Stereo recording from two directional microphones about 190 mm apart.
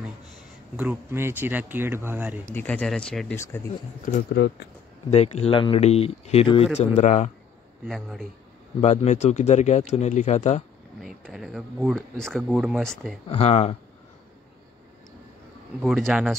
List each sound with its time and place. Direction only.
0.7 s speech: 10° right (ahead or behind)
2.5 s speech: 10° left (ahead or behind)
4.0 s speech: 50° left (ahead or behind)
5.1 s speech: 35° left (ahead or behind)
7.8 s speech: centre (ahead or behind)
8.8 s speech: 40° left (ahead or behind)
11.0 s speech: centre (ahead or behind)
13.3 s speech: 35° left (ahead or behind)
15.8 s speech: centre (ahead or behind)